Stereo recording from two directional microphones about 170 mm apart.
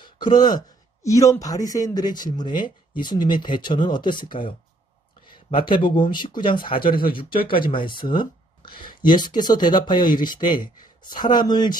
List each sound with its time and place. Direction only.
0.0 s speech: 25° left (ahead or behind)